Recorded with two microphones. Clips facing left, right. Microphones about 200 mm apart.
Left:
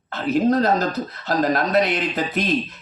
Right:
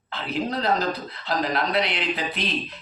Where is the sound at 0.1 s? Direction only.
45° left (ahead or behind).